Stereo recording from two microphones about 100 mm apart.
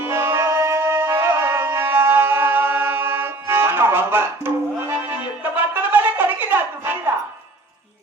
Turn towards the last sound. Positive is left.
turn(degrees=-20)  # may be behind; listen again after turning